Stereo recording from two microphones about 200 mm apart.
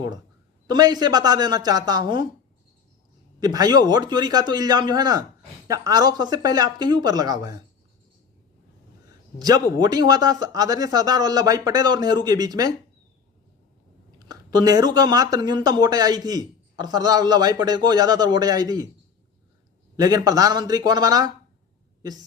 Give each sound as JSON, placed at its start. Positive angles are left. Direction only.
{"t": 0.7, "sound": "speech", "side_deg": -20}
{"t": 3.4, "sound": "speech", "side_deg": -20}
{"t": 9.4, "sound": "speech", "side_deg": -20}
{"t": 14.2, "sound": "speech", "side_deg": -20}
{"t": 20.0, "sound": "speech", "side_deg": -20}